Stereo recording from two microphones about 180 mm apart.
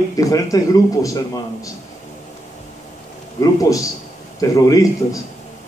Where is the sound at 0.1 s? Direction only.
20° left (ahead or behind).